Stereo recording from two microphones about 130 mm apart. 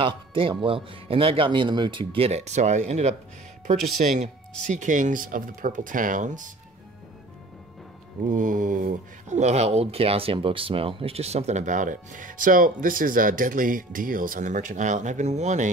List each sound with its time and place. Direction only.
0.0 s a man's voice: 40° right (ahead or behind); by 3.2 s 60° right (ahead or behind)
4.0 s speech: 75° right (ahead or behind)
8.3 s speech: 85° right; by 15.7 s 65° right (ahead or behind)